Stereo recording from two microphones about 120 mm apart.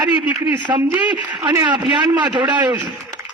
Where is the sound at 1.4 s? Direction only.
35° right (ahead or behind).